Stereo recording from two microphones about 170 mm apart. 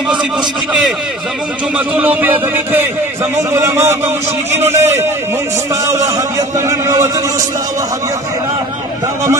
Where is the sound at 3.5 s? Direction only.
15° right (ahead or behind).